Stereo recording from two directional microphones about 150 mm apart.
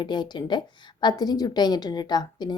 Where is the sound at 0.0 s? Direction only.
30° left (ahead or behind).